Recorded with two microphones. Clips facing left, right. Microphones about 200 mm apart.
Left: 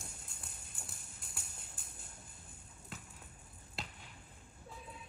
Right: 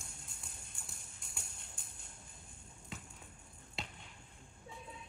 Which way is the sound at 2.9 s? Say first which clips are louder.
Right 2 dB; centre (ahead or behind).